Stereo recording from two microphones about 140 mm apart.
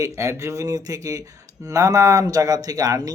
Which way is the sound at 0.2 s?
20° right (ahead or behind).